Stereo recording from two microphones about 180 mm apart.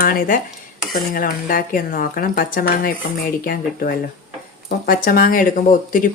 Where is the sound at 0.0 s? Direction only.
50° left (ahead or behind).